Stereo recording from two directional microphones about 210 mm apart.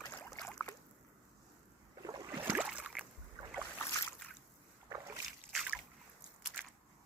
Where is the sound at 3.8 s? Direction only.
15° left (ahead or behind).